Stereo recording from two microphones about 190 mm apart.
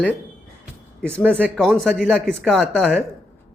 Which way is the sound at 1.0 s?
5° left (ahead or behind).